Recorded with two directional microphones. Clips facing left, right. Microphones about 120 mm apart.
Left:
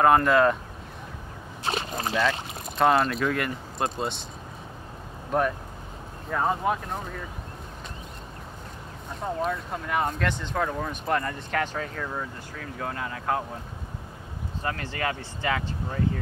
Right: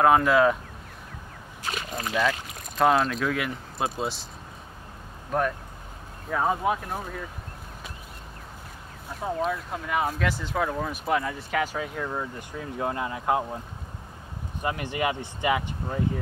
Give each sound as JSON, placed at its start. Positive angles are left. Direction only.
{"t": 0.0, "sound": "speech", "side_deg": 0}
{"t": 1.6, "sound": "a sound", "side_deg": 30}
{"t": 2.8, "sound": "speech", "side_deg": 0}
{"t": 5.3, "sound": "speech", "side_deg": 0}
{"t": 9.2, "sound": "speech", "side_deg": 0}
{"t": 14.6, "sound": "speech", "side_deg": -15}